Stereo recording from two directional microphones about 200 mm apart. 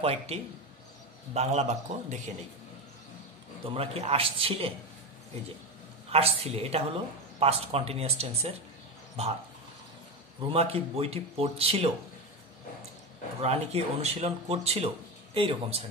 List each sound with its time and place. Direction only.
0.0 s speech: 30° right (ahead or behind)
3.6 s speech: 30° right (ahead or behind)
6.0 s speech: 30° right (ahead or behind)
10.5 s speech: 30° right (ahead or behind)
13.4 s speech: 30° right (ahead or behind)